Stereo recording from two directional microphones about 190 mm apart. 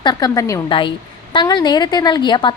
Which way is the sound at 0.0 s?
20° left (ahead or behind).